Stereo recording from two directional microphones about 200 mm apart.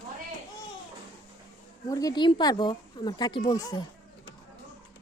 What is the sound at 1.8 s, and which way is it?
Speech, 15° left (ahead or behind).